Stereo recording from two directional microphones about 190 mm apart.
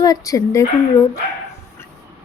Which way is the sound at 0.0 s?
20° left (ahead or behind).